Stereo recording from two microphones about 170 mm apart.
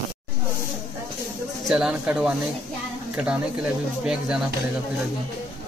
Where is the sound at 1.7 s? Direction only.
5° right (ahead or behind).